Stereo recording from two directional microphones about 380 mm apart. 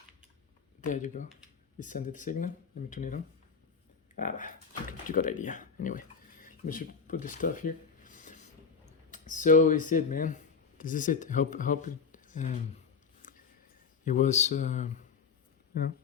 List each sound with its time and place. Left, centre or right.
0.8 s speech: centre
9.0 s clicking: centre
9.4 s speech: centre
13.2 s a sound: left
14.0 s speech: centre